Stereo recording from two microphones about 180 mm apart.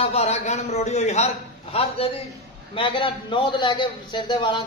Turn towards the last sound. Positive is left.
turn(degrees=25)  # may be behind; listen again after turning